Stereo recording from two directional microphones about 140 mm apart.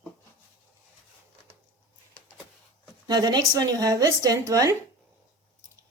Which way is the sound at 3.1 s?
30° right (ahead or behind).